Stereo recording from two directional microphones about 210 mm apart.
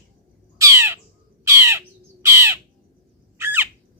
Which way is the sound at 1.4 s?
15° right (ahead or behind).